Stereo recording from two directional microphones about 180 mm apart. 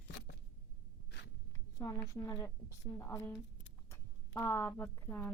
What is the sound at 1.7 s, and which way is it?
A woman's voice, 20° left (ahead or behind).